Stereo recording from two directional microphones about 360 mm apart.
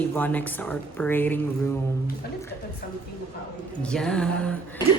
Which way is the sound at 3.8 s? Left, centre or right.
Centre.